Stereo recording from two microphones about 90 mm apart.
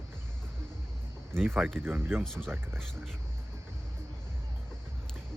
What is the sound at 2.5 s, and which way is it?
Speech, 25° right (ahead or behind).